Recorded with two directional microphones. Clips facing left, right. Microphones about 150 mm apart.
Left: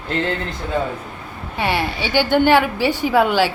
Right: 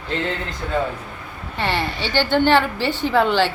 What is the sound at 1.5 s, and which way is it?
A woman's voice, 10° left (ahead or behind).